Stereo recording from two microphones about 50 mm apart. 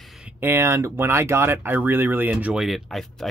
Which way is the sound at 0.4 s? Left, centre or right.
Right.